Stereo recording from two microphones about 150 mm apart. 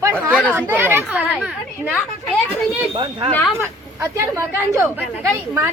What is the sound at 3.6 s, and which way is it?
Speech, 20° right (ahead or behind).